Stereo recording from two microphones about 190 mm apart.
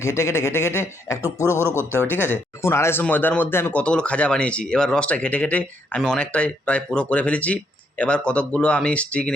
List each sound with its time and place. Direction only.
0.0 s speech: 15° left (ahead or behind)
1.5 s speech: 10° right (ahead or behind)
2.3 s speech: 15° left (ahead or behind)